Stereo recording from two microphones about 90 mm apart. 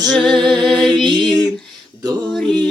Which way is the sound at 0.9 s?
55° right (ahead or behind).